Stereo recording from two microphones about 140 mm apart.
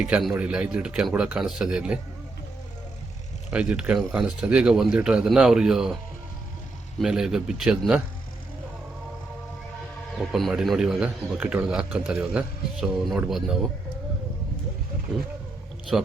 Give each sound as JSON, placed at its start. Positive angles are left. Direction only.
{"t": 0.3, "sound": "speech", "side_deg": -10}
{"t": 3.5, "sound": "a man's voice", "side_deg": -10}
{"t": 7.0, "sound": "a man's voice", "side_deg": -5}
{"t": 10.2, "sound": "a man's voice", "side_deg": 0}
{"t": 15.9, "sound": "speech", "side_deg": -5}